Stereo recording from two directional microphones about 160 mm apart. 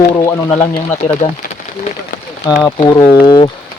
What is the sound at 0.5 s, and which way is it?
Speech, 40° left (ahead or behind).